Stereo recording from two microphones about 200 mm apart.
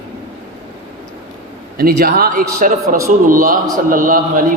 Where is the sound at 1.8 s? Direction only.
50° right (ahead or behind).